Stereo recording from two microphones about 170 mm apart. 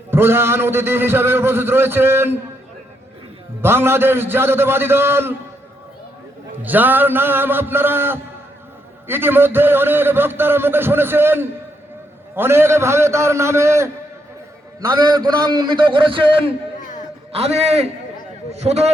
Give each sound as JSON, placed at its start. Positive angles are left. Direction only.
{"t": 0.1, "sound": "a man's voice", "side_deg": -15}
{"t": 3.6, "sound": "a man's voice", "side_deg": -15}
{"t": 6.6, "sound": "a man's voice", "side_deg": -10}
{"t": 14.9, "sound": "a man's voice", "side_deg": -25}